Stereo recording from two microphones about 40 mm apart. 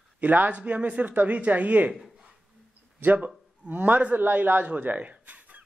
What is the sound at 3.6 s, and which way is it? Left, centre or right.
A man's voice, right.